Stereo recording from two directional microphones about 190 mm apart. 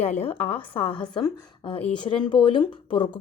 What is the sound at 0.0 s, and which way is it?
Speech, 35° left (ahead or behind).